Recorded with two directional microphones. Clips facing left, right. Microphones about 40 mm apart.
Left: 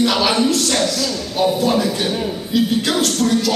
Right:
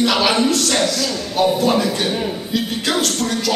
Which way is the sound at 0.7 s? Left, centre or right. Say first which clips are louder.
Even; centre.